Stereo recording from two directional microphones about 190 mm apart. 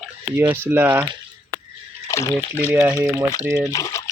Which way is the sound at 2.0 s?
15° left (ahead or behind).